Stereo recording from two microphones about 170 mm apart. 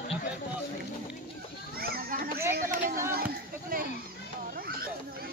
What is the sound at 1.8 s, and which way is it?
Children playing, 60° right (ahead or behind).